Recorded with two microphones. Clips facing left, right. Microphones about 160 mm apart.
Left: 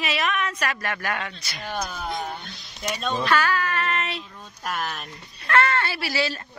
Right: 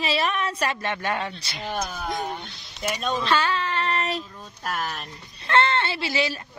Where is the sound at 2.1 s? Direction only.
15° right (ahead or behind).